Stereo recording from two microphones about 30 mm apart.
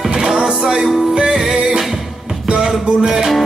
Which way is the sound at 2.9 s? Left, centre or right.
Right.